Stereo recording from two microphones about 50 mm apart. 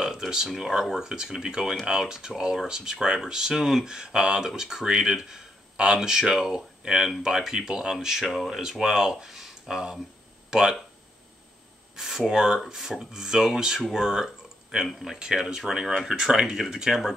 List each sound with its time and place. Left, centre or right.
0.0 s speech: centre
11.9 s a sound: centre
12.3 s speech: centre